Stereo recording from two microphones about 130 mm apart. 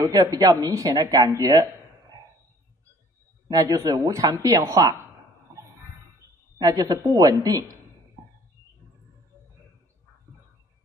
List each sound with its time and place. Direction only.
0.0 s speech: 25° right (ahead or behind)
3.4 s speech: 30° right (ahead or behind)
6.6 s speech: 30° right (ahead or behind)